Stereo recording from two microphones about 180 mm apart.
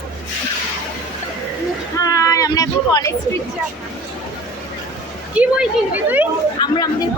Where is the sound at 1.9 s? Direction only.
20° left (ahead or behind).